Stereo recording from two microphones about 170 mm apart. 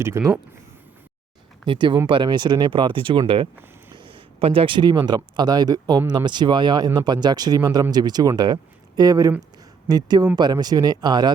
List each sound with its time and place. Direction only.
0.0 s speech: 15° right (ahead or behind)
1.6 s speech: 30° right (ahead or behind)